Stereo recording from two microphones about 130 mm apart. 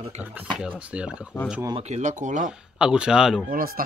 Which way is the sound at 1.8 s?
60° right (ahead or behind).